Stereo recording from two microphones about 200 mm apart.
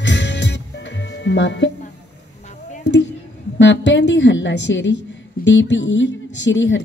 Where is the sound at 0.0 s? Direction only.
65° left (ahead or behind).